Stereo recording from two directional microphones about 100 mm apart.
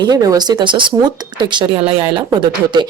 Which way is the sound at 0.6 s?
55° right (ahead or behind).